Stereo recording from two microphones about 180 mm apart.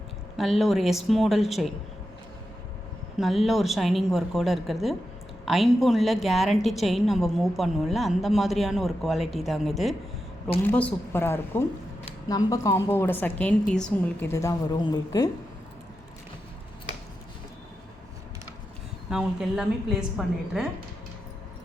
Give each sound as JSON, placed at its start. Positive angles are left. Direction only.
{"t": 0.3, "sound": "a woman's voice", "side_deg": 0}
{"t": 3.2, "sound": "a woman's voice", "side_deg": 0}
{"t": 14.3, "sound": "a woman's voice", "side_deg": 15}
{"t": 19.1, "sound": "a woman's voice", "side_deg": -5}